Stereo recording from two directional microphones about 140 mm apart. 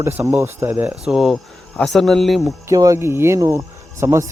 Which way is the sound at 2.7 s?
25° right (ahead or behind).